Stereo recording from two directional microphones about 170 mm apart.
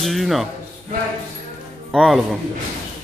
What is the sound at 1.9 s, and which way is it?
Speech, centre (ahead or behind).